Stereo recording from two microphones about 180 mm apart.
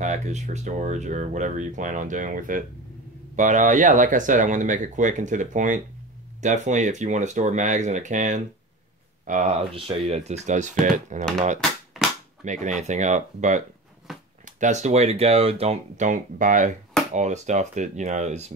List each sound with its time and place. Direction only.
0.0 s speech: 40° right (ahead or behind)
11.9 s cap gun: centre (ahead or behind)
12.4 s speech: 40° right (ahead or behind)
14.1 s a sound: centre (ahead or behind)
14.4 s speech: 40° right (ahead or behind)